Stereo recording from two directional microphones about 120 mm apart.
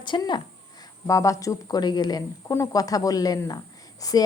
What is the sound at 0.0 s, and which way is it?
Speech, 40° left (ahead or behind).